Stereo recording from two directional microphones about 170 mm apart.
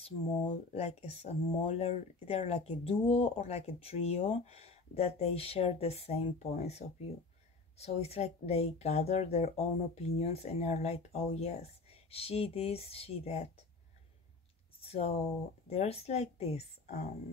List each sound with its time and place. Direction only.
0.0 s speech: 40° left (ahead or behind)
14.8 s speech: 35° left (ahead or behind)